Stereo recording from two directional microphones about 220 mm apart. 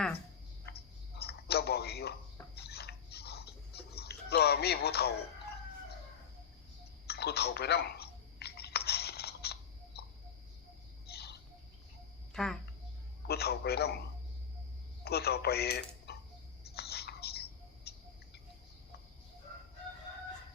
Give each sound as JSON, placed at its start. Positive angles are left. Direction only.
{"t": 0.6, "sound": "a sound", "side_deg": 45}
{"t": 2.6, "sound": "chewing", "side_deg": 45}
{"t": 7.1, "sound": "a sound", "side_deg": 45}
{"t": 11.1, "sound": "bird", "side_deg": 45}
{"t": 12.3, "sound": "speech", "side_deg": 5}
{"t": 13.2, "sound": "a man's voice", "side_deg": 45}
{"t": 15.0, "sound": "speech", "side_deg": 45}
{"t": 16.7, "sound": "a sound", "side_deg": 45}
{"t": 17.9, "sound": "bird", "side_deg": 45}